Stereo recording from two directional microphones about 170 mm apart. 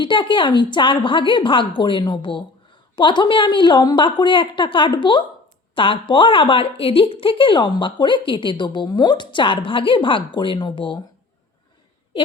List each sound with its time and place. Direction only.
0.0 s a woman's voice: 30° left (ahead or behind)